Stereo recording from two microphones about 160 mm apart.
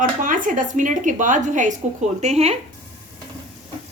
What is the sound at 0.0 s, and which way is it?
A woman's voice, 55° right (ahead or behind).